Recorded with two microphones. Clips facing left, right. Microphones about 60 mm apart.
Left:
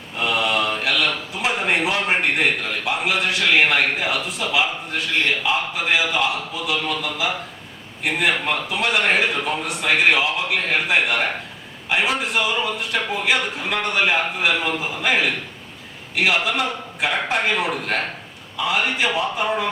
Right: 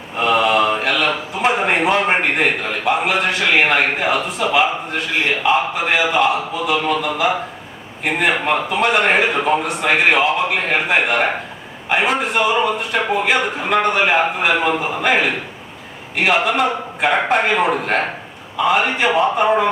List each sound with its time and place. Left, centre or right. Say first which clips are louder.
0.3 s mantra: right 6 dB; centre
1.5 s a man's voice: right 3 dB; centre
9.6 s a man's voice: right 3 dB; centre